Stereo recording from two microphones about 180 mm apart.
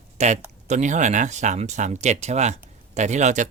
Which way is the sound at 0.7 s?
45° right (ahead or behind).